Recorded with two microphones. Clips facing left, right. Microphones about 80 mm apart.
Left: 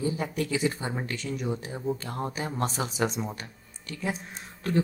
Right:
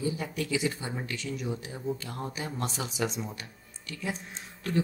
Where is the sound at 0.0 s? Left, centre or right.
Left.